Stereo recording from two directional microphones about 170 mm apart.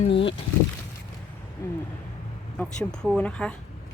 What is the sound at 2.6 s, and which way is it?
Speech, 5° left (ahead or behind).